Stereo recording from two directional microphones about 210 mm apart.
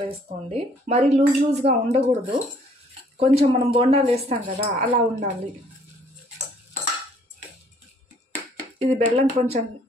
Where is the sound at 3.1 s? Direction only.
25° right (ahead or behind).